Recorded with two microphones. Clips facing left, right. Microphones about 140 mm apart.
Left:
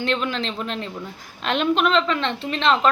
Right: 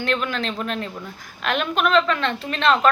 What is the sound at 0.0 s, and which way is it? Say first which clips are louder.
A woman's voice: even; 30° left (ahead or behind).